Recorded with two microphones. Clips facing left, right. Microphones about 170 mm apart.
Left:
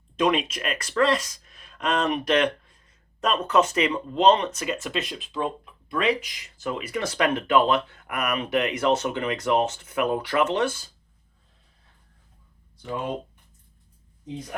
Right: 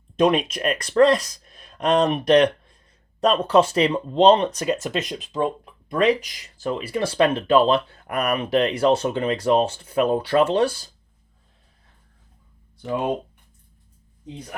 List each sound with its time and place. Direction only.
0.2 s speech: 35° right (ahead or behind)